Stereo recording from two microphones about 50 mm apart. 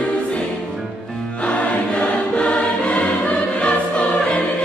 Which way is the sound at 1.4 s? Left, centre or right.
Left.